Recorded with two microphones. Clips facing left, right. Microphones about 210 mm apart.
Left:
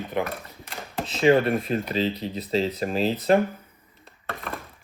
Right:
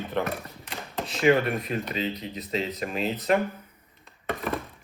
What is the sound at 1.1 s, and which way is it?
Speech, 30° left (ahead or behind).